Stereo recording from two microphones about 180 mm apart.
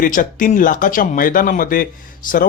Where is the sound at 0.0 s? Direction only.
50° left (ahead or behind).